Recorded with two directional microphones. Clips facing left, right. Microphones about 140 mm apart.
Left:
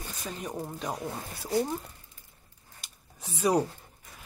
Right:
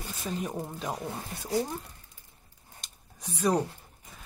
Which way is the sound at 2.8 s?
5° left (ahead or behind).